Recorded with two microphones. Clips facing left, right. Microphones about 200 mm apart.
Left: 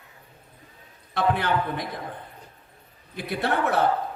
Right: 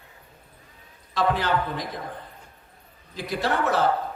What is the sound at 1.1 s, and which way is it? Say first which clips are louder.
Speech: even; 60° left (ahead or behind).